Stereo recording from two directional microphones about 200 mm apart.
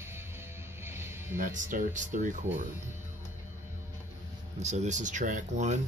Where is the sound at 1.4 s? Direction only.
40° right (ahead or behind).